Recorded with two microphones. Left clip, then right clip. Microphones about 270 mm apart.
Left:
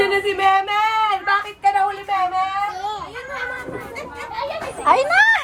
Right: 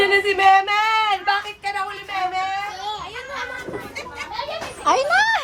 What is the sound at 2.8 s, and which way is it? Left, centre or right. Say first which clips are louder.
Children playing: left 2 dB; centre.